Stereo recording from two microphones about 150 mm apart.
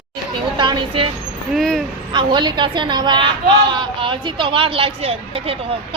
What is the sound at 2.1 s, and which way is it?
Speech, 30° right (ahead or behind).